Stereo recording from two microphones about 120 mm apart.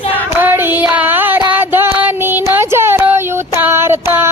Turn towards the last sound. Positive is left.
turn(degrees=-20)  # may be behind; listen again after turning